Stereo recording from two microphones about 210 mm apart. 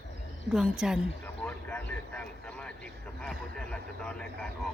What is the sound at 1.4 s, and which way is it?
Vehicle, 5° left (ahead or behind).